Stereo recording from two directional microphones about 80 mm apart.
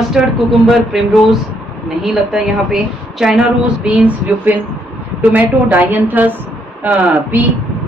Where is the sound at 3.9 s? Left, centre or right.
Centre.